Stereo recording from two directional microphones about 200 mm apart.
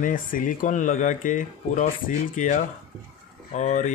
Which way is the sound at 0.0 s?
45° left (ahead or behind).